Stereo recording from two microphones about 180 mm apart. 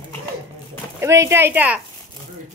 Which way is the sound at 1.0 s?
15° right (ahead or behind).